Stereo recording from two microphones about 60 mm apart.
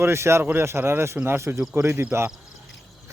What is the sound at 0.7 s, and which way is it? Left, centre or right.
Speech, right.